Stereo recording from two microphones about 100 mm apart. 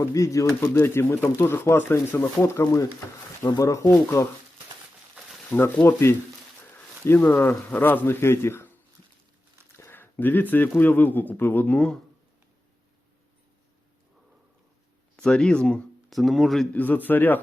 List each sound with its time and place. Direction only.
0.0 s speech: 30° left (ahead or behind)
5.5 s speech: 20° left (ahead or behind)
9.7 s a sound: 25° left (ahead or behind)
10.8 s speech: 20° left (ahead or behind)
15.1 s speech: 10° left (ahead or behind)
16.7 s speech: 15° left (ahead or behind)